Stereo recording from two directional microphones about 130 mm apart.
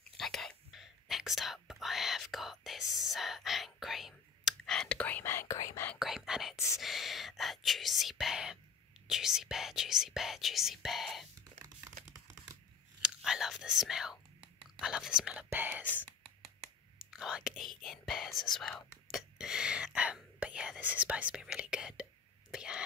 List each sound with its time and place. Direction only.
0.2 s speech: centre (ahead or behind); by 5.9 s 20° left (ahead or behind)
5.9 s speech: 5° right (ahead or behind)
11.6 s crumpling: 25° right (ahead or behind)
13.0 s speech: 5° right (ahead or behind)
15.8 s speech: 15° left (ahead or behind)
17.0 s speech: 5° right (ahead or behind)
19.0 s whispering: 5° right (ahead or behind)
22.5 s a sound: 5° right (ahead or behind)